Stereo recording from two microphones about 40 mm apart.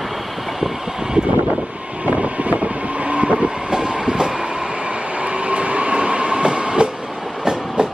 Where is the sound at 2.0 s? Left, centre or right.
Right.